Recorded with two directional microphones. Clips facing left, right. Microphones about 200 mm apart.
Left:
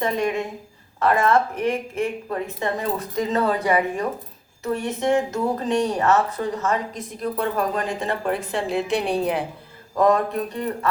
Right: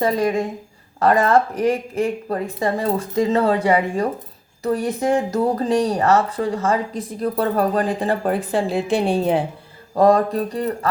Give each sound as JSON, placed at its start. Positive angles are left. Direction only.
{"t": 0.0, "sound": "speech", "side_deg": -35}